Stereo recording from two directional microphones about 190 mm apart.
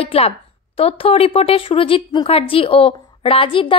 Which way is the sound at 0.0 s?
30° left (ahead or behind).